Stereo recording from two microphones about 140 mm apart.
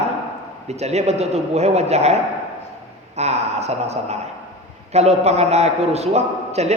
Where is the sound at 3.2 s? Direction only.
50° right (ahead or behind).